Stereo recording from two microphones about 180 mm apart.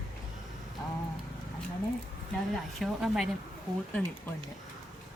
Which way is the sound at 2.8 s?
Centre (ahead or behind).